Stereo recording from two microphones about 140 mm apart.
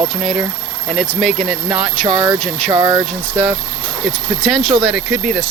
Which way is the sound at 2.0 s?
30° right (ahead or behind).